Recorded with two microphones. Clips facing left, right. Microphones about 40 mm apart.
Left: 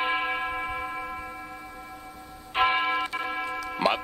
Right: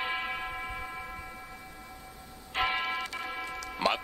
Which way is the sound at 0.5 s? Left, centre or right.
Left.